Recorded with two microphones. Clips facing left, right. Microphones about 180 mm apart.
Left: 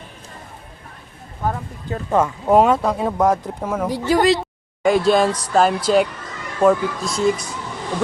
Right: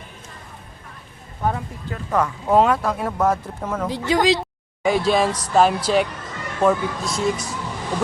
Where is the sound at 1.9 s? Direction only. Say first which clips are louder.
Left 3 dB; 25° left (ahead or behind); by 7.4 s centre (ahead or behind).